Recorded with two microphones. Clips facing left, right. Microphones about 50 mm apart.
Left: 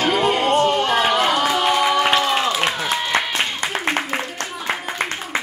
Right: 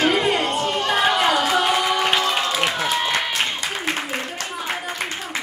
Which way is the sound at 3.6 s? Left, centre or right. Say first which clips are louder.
Left 3 dB; left.